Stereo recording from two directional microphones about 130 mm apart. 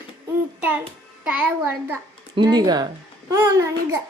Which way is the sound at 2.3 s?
30° right (ahead or behind).